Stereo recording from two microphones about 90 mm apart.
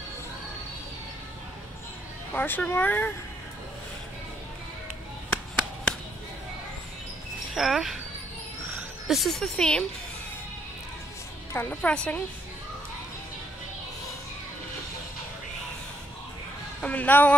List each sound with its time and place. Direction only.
2.3 s speech: 20° left (ahead or behind)
7.5 s speech: 5° right (ahead or behind)
9.0 s speech: centre (ahead or behind)
11.5 s a woman's voice: 15° left (ahead or behind)
16.8 s a woman's voice: 15° left (ahead or behind)